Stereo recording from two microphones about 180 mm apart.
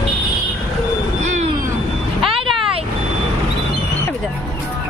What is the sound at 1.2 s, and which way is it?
Vehicle, 40° right (ahead or behind).